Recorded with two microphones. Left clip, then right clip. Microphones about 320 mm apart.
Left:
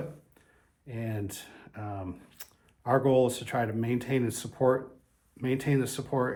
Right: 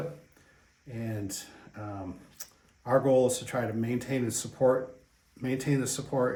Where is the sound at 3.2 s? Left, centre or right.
Left.